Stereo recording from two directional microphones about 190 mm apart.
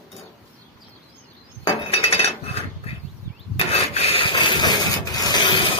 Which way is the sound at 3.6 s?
35° left (ahead or behind).